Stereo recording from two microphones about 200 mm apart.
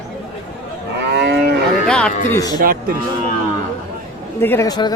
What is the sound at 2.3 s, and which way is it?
Speech, 20° left (ahead or behind).